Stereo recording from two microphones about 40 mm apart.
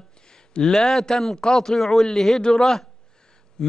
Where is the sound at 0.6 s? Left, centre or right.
Centre.